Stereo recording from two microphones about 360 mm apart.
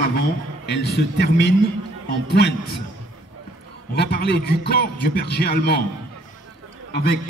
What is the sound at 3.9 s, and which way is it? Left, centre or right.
A man's voice, left.